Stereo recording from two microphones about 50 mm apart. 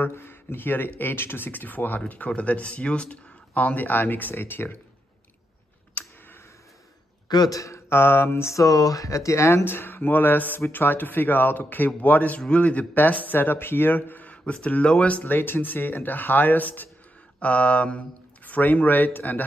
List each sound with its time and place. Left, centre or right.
0.0 s speech: left
6.0 s a sound: left
7.6 s speech: left
9.7 s speech: left
14.3 s speech: left
15.2 s speech: left
17.4 s speech: left